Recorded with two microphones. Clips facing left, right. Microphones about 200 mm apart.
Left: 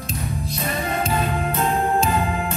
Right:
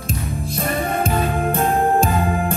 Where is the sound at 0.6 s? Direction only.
50° right (ahead or behind).